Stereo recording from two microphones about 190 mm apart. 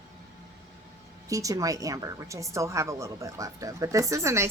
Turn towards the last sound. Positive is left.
turn(degrees=-15)  # may be behind; listen again after turning